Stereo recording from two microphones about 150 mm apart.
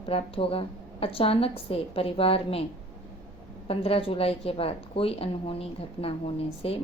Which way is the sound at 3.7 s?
40° left (ahead or behind).